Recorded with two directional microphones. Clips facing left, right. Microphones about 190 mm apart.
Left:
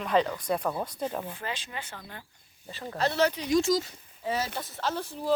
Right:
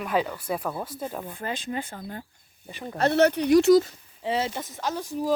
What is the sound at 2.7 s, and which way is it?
Speech, 15° right (ahead or behind).